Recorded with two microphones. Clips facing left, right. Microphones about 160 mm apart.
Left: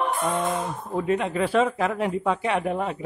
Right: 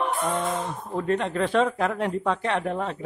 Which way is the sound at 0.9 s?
5° left (ahead or behind).